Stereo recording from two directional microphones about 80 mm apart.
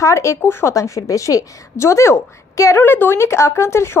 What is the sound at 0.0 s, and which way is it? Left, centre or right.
A woman's voice, left.